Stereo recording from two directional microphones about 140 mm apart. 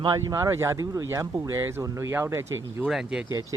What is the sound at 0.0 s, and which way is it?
Speech, 25° right (ahead or behind).